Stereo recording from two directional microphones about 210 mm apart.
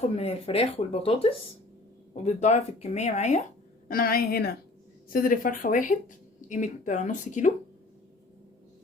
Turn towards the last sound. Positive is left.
turn(degrees=35)  # may be behind; listen again after turning